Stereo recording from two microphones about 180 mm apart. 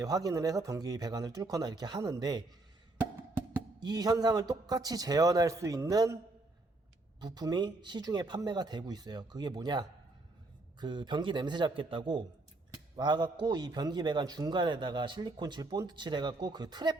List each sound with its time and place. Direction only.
0.0 s a man's voice: 20° right (ahead or behind)
3.8 s a man's voice: 20° right (ahead or behind)
7.2 s a man's voice: 20° right (ahead or behind)